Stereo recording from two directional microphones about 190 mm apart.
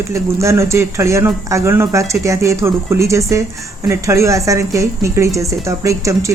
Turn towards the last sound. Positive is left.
turn(degrees=-15)  # may be behind; listen again after turning